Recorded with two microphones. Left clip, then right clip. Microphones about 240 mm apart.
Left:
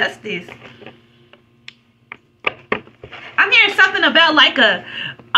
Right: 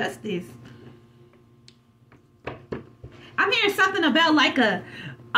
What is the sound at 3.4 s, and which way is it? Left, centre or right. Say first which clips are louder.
Speech: left 9 dB; right.